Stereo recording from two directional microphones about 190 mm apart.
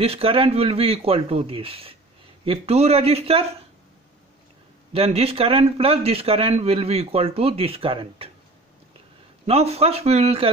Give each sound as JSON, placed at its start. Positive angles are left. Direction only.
{"t": 0.0, "sound": "a man's voice", "side_deg": -30}
{"t": 4.9, "sound": "a man's voice", "side_deg": -30}
{"t": 9.5, "sound": "a man's voice", "side_deg": -35}